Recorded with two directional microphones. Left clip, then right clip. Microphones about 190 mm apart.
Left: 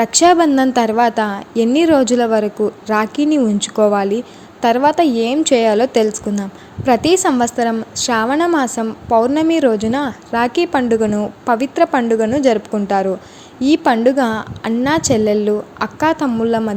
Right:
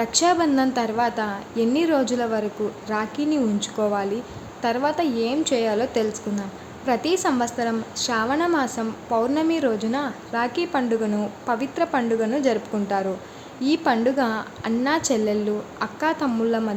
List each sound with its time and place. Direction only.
0.0 s a woman's voice: 35° left (ahead or behind)